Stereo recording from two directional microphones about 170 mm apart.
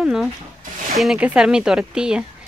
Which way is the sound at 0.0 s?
Centre (ahead or behind).